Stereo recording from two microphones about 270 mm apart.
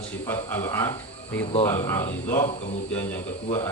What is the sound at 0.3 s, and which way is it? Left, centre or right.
Speech, centre.